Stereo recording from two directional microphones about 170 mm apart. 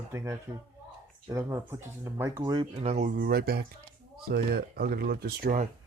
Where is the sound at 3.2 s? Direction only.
60° right (ahead or behind).